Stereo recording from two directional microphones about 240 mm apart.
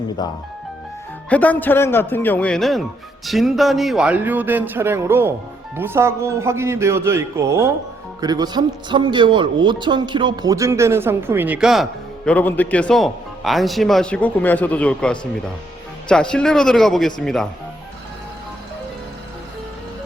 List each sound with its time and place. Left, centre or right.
0.2 s speech: centre
1.3 s speech: centre